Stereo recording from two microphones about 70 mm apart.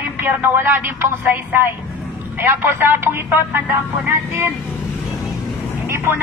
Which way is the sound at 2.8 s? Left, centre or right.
Right.